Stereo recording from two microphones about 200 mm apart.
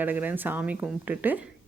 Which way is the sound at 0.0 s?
10° right (ahead or behind).